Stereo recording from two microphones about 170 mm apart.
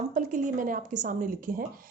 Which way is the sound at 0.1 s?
50° right (ahead or behind).